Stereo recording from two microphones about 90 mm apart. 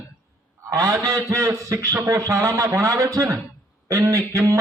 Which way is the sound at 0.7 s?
40° right (ahead or behind).